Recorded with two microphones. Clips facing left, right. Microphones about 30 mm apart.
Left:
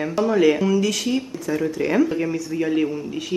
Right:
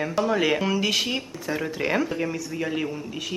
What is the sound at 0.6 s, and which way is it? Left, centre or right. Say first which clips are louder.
Speech: left 3 dB; right.